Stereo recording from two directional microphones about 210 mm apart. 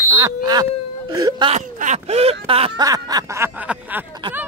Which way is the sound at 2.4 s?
25° right (ahead or behind).